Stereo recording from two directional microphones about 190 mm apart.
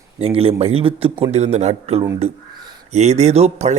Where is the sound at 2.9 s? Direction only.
35° right (ahead or behind).